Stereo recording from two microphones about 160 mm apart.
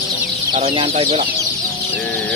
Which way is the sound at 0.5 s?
35° right (ahead or behind).